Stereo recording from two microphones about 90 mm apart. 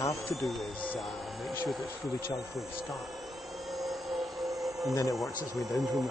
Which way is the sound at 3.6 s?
Centre (ahead or behind).